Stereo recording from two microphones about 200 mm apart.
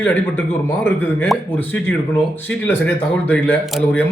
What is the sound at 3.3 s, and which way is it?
Speech, 5° left (ahead or behind).